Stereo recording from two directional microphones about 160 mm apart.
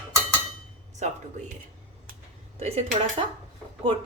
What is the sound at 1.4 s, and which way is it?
Speech, 50° right (ahead or behind).